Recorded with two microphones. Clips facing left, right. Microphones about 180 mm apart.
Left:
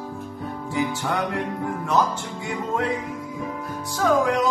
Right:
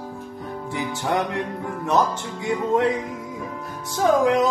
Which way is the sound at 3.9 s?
20° right (ahead or behind).